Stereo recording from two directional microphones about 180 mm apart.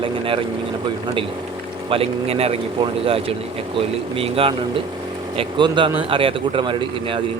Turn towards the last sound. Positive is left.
turn(degrees=-25)  # may be behind; listen again after turning